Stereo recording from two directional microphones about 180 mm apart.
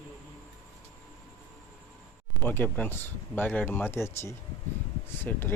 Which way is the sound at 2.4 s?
10° left (ahead or behind).